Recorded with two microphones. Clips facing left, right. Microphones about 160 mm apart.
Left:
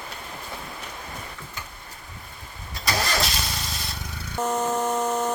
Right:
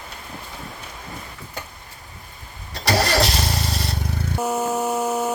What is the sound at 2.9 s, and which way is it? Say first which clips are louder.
Vehicle: right 6 dB; 70° right (ahead or behind).